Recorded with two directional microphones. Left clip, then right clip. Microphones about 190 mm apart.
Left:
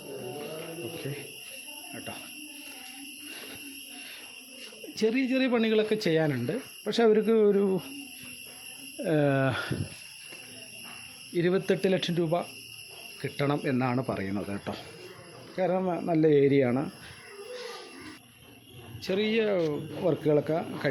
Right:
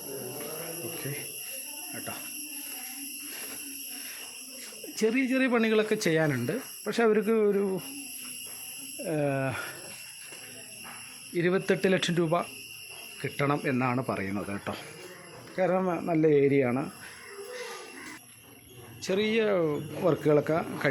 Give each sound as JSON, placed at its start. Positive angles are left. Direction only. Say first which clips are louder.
{"t": 1.9, "sound": "speech", "louder": "right 1 dB", "side_deg": 0}
{"t": 4.9, "sound": "speech", "louder": "even", "side_deg": 0}
{"t": 9.0, "sound": "speech", "louder": "left 4 dB", "side_deg": 30}
{"t": 11.3, "sound": "speech", "louder": "even", "side_deg": 5}
{"t": 17.5, "sound": "a sound", "louder": "even", "side_deg": 0}
{"t": 19.0, "sound": "speech", "louder": "right 1 dB", "side_deg": 0}